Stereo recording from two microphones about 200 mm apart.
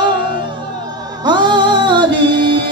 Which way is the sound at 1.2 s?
20° right (ahead or behind).